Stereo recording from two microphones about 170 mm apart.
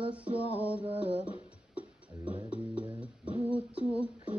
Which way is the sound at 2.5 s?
5° right (ahead or behind).